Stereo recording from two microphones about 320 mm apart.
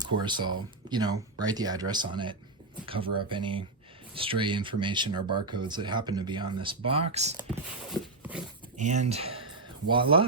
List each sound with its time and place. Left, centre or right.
0.0 s speech: centre
8.2 s dog: centre
8.8 s speech: right